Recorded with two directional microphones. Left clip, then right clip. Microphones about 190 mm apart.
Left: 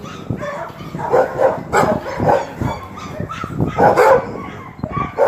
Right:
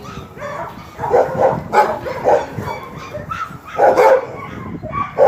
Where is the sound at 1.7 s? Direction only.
40° left (ahead or behind).